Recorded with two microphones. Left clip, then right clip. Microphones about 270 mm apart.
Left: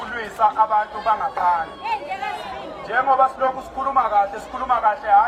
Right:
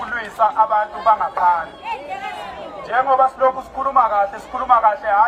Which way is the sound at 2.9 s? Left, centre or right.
Centre.